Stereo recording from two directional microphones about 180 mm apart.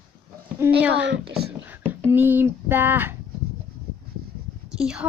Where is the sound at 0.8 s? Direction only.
10° right (ahead or behind).